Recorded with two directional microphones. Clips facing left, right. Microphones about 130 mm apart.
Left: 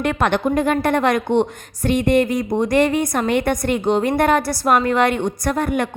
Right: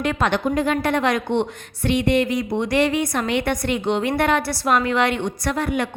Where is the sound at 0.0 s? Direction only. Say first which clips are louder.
Left 2 dB; 55° left (ahead or behind).